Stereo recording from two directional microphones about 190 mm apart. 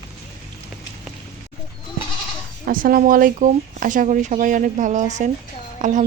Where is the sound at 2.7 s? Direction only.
50° right (ahead or behind).